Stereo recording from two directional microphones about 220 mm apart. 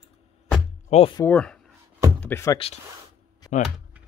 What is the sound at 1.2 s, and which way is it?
Speech, 5° left (ahead or behind).